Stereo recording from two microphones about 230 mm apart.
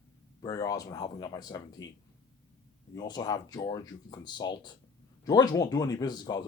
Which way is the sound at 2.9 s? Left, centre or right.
Centre.